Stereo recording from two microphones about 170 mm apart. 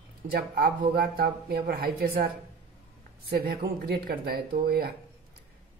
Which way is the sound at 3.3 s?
65° right (ahead or behind).